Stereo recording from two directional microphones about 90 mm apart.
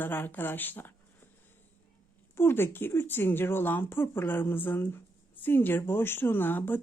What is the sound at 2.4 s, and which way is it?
Speech, 25° left (ahead or behind).